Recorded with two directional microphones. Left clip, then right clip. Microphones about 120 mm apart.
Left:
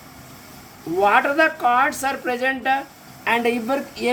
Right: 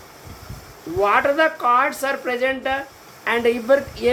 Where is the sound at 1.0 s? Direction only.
40° left (ahead or behind).